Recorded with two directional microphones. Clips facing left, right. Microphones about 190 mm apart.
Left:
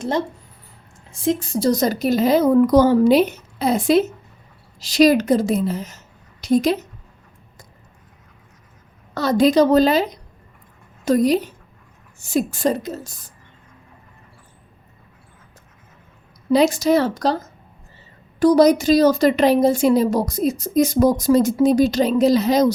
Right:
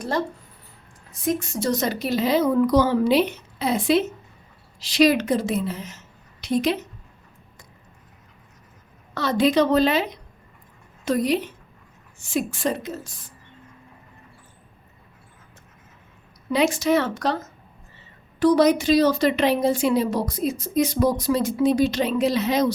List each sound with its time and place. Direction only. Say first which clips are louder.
0.0 s a woman's voice: left 3 dB; 20° left (ahead or behind); by 6.7 s 40° left (ahead or behind)
9.1 s a woman's voice: left 4 dB; 40° left (ahead or behind)
16.5 s a woman's voice: left 5 dB; 40° left (ahead or behind)
18.3 s a woman's voice: left 4 dB; 40° left (ahead or behind)